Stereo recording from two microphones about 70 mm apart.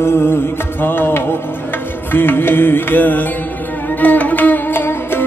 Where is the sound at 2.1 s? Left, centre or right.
Left.